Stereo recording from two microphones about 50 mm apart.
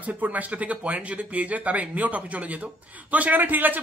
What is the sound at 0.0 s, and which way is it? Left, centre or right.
Speech, right.